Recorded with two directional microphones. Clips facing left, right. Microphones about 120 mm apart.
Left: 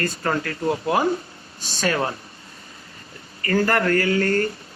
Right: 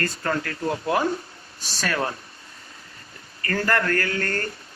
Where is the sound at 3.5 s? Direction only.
20° left (ahead or behind).